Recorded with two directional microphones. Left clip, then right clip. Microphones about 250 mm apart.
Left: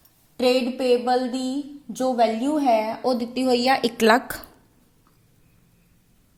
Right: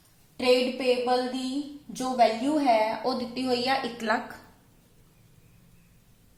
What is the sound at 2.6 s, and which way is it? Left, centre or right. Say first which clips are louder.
A woman's voice: left 3 dB; left.